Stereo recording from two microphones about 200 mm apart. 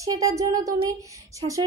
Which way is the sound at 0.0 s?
15° right (ahead or behind).